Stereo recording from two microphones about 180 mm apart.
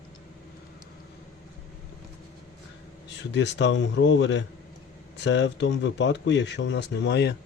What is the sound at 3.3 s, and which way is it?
Speech, 75° left (ahead or behind).